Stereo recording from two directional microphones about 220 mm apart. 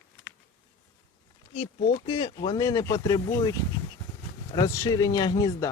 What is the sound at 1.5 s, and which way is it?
Speech, 25° left (ahead or behind).